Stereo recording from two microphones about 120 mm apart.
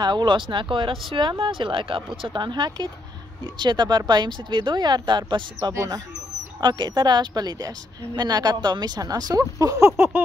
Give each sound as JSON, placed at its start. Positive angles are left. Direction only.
{"t": 0.0, "sound": "speech", "side_deg": -40}
{"t": 5.7, "sound": "speech", "side_deg": -25}